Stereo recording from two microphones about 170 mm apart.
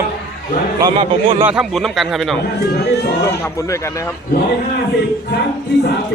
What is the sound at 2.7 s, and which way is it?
Speech, 75° left (ahead or behind).